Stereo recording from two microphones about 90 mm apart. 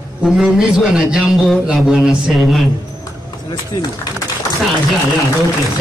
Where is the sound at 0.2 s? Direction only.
5° right (ahead or behind).